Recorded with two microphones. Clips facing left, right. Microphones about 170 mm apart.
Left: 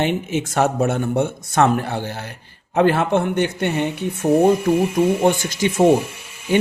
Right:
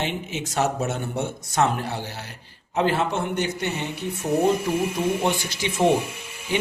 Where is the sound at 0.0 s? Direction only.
55° left (ahead or behind).